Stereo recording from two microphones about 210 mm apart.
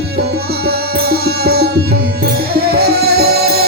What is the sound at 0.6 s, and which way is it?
Music, 50° right (ahead or behind).